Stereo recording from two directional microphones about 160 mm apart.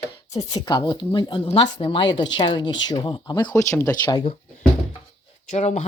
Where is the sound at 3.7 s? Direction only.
10° left (ahead or behind).